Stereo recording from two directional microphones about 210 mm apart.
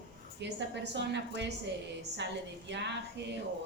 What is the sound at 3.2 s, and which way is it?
Speech, 55° right (ahead or behind).